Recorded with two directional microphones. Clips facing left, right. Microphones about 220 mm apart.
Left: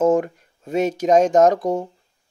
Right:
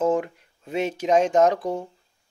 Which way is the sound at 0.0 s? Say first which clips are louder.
Left 5 dB; 45° left (ahead or behind).